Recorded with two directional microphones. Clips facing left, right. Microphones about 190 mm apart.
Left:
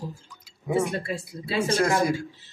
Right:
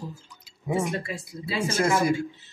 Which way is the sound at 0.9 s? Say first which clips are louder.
Left 1 dB; 30° left (ahead or behind).